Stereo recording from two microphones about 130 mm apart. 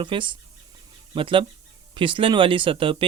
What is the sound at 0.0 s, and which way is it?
Speech, 40° right (ahead or behind).